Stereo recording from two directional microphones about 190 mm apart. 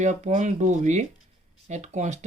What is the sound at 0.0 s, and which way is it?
Speech, 40° right (ahead or behind).